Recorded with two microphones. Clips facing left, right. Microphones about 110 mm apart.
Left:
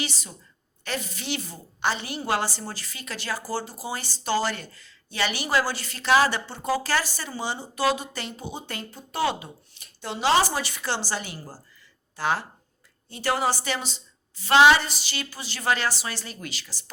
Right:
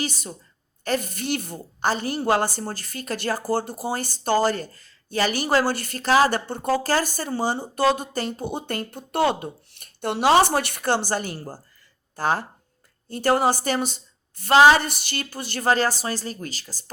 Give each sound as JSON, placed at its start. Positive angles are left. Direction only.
{"t": 0.0, "sound": "a woman's voice", "side_deg": -45}
{"t": 14.5, "sound": "a sound", "side_deg": -40}
{"t": 14.8, "sound": "a woman's voice", "side_deg": -55}